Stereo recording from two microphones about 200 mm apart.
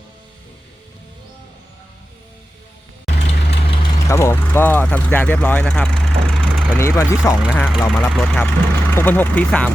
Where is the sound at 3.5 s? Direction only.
25° left (ahead or behind).